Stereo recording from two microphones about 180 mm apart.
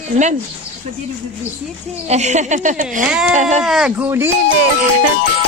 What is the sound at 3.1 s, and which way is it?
Speech, 5° right (ahead or behind).